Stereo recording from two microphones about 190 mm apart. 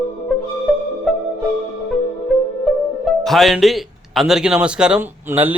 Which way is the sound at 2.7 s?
Centre (ahead or behind).